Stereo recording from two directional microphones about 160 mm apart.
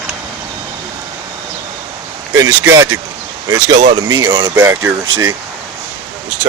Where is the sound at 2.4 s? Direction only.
20° right (ahead or behind).